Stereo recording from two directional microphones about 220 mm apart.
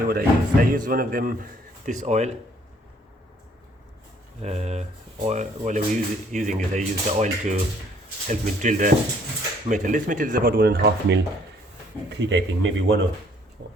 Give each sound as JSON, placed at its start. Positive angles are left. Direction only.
{"t": 0.0, "sound": "speech", "side_deg": -40}
{"t": 4.4, "sound": "speech", "side_deg": -30}
{"t": 13.6, "sound": "vehicle", "side_deg": -50}